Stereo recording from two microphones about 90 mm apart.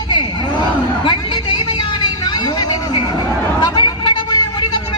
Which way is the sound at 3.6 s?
60° left (ahead or behind).